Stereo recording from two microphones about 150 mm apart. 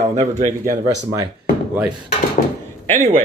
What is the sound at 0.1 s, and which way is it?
Speech, 50° right (ahead or behind).